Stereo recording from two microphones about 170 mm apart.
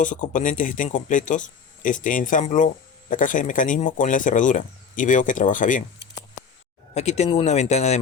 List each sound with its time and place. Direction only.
0.0 s speech: 50° left (ahead or behind)
6.9 s speech: 40° left (ahead or behind)